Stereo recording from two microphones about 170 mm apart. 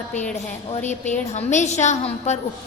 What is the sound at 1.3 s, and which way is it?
A woman's voice, 45° left (ahead or behind).